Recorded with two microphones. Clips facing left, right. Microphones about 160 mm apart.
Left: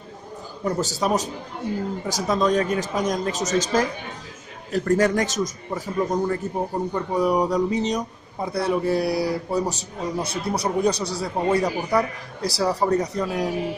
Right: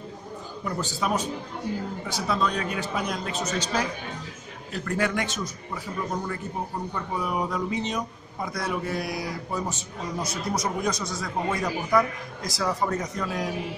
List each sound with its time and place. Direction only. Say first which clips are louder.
0.7 s speech: left 5 dB; 40° left (ahead or behind)